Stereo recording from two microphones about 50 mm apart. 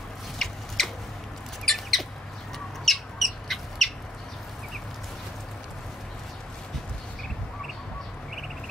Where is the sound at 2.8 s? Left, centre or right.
Centre.